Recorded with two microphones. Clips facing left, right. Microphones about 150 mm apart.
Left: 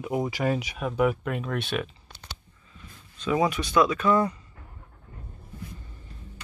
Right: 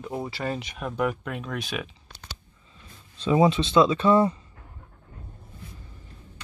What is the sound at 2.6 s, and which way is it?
Speech, 30° right (ahead or behind).